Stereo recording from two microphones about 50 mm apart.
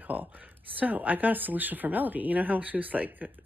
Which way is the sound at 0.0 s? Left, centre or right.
Right.